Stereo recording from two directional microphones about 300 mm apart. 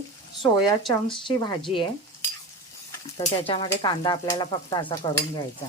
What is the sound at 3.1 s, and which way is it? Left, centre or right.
Stir, centre.